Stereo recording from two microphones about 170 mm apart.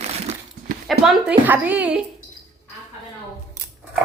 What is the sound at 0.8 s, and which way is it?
A woman's voice, centre (ahead or behind).